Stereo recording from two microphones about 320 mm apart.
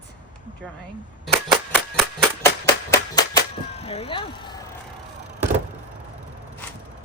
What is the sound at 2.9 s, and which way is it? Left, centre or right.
Speech, centre.